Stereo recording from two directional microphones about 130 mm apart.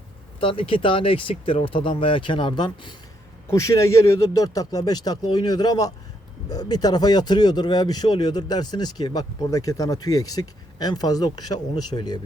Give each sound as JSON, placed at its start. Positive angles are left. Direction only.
{"t": 0.3, "sound": "speech", "side_deg": 45}
{"t": 3.5, "sound": "speech", "side_deg": 25}